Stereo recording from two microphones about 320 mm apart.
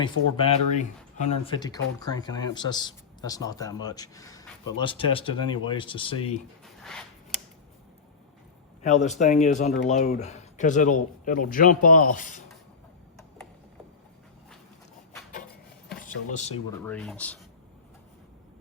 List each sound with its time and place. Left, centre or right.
0.0 s speech: centre
8.8 s speech: left
15.9 s speech: left
16.7 s speech: centre